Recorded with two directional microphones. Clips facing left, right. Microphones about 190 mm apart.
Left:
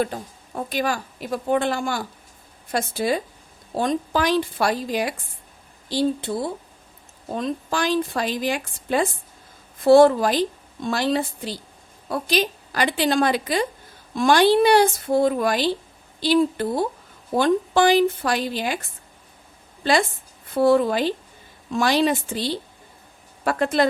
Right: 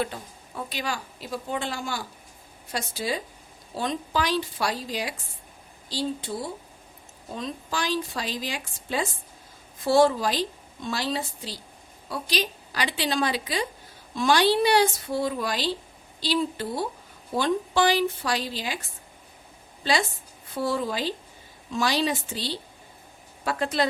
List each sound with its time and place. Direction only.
0.0 s a woman's voice: 45° left (ahead or behind)
7.3 s a woman's voice: 55° left (ahead or behind)
19.8 s a woman's voice: 55° left (ahead or behind)